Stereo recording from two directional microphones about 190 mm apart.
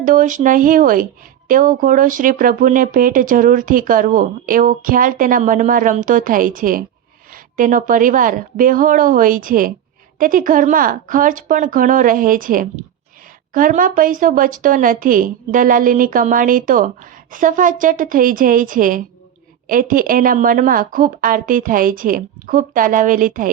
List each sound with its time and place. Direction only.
0.0 s speech: 45° right (ahead or behind)